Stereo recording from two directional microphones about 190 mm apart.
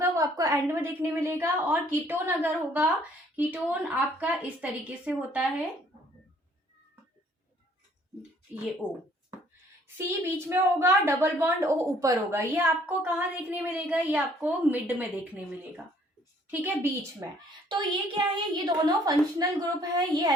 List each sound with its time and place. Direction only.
0.0 s a woman's voice: 15° right (ahead or behind)
10.5 s a woman's voice: 15° right (ahead or behind)
16.5 s a woman's voice: 10° right (ahead or behind)
17.7 s a woman's voice: 25° right (ahead or behind)